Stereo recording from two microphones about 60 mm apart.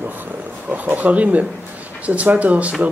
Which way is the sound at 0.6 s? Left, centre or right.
Right.